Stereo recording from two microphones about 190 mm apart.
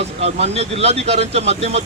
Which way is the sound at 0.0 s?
35° right (ahead or behind).